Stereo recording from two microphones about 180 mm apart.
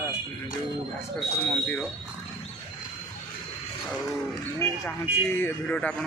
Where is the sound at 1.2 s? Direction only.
5° left (ahead or behind).